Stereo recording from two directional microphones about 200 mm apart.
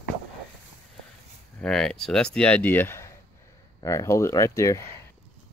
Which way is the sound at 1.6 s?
5° left (ahead or behind).